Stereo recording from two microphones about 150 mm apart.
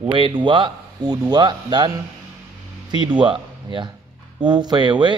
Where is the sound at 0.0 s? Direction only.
35° right (ahead or behind).